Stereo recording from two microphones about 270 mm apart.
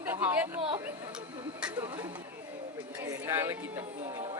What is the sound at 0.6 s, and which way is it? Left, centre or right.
Speech, centre.